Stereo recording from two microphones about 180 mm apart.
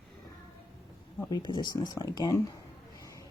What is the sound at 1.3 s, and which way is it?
Speech, 25° left (ahead or behind).